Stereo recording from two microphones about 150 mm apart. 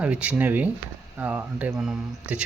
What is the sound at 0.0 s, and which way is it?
Speech, 10° right (ahead or behind).